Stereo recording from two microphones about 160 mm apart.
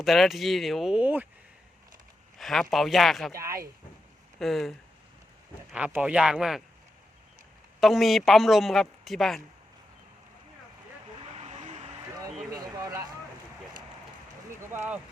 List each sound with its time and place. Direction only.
0.0 s speech: centre (ahead or behind)
2.4 s speech: centre (ahead or behind)
3.3 s speech: 20° right (ahead or behind)
4.4 s speech: centre (ahead or behind)
5.7 s speech: 10° right (ahead or behind)
7.8 s speech: centre (ahead or behind)
11.3 s vehicle: 45° right (ahead or behind)
12.5 s a sound: 20° right (ahead or behind)
14.7 s speech: 10° right (ahead or behind)